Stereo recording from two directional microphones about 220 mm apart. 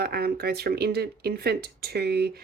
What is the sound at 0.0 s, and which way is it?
Speech, 45° right (ahead or behind).